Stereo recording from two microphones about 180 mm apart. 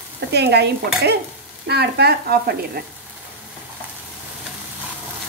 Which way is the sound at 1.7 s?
65° right (ahead or behind).